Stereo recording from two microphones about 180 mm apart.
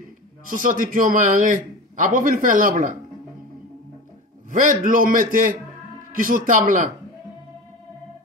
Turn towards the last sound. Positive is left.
turn(degrees=-45)  # may be behind; listen again after turning